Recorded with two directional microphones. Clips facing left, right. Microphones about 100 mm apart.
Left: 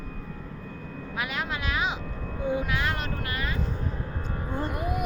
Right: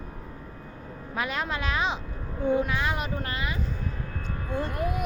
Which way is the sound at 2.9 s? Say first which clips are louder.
Right 1 dB; 15° right (ahead or behind).